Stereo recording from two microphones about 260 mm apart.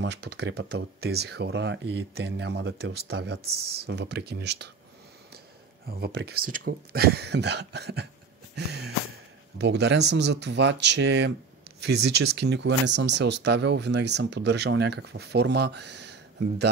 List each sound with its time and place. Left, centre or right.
0.0 s speech: right
5.9 s speech: right
8.5 s a sound: right
9.6 s speech: right